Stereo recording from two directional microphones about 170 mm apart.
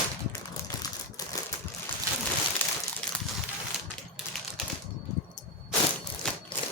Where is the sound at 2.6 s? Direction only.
10° left (ahead or behind).